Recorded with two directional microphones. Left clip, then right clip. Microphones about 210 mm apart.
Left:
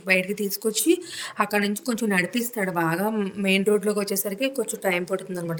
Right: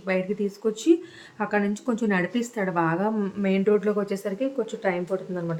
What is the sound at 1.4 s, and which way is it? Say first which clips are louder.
Speech: left 5 dB; 55° left (ahead or behind).